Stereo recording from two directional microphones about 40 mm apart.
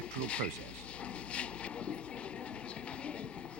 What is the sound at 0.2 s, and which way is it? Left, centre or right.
Speech, left.